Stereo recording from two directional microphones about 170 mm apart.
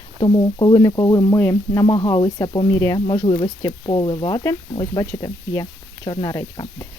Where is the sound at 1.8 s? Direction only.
25° left (ahead or behind).